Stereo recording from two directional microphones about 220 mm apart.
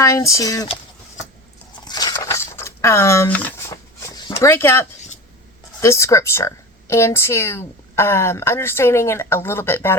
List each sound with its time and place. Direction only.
0.0 s a woman's voice: 15° left (ahead or behind)
1.9 s a sound: 20° left (ahead or behind)
5.8 s a woman's voice: 15° left (ahead or behind)